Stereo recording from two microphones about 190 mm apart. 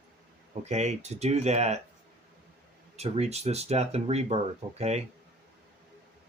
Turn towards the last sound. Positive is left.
turn(degrees=-35)  # may be behind; listen again after turning